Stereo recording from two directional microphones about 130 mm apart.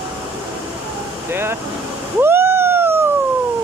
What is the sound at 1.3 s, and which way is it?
Speech, 20° right (ahead or behind).